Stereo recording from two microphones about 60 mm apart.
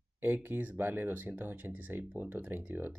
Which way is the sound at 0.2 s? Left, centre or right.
Right.